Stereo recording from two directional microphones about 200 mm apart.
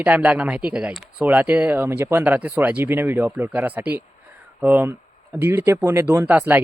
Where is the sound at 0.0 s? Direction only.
5° right (ahead or behind).